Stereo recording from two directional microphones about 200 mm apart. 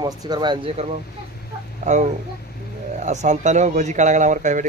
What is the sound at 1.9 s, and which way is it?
Speech, 35° right (ahead or behind).